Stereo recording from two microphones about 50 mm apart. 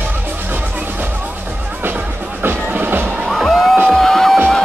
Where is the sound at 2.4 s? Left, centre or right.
Right.